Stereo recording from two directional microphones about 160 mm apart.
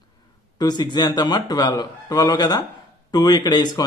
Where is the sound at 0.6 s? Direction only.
25° left (ahead or behind).